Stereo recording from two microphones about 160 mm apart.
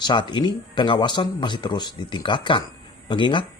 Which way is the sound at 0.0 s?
30° left (ahead or behind).